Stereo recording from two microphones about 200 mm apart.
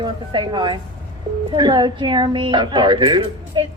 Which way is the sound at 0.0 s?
25° right (ahead or behind).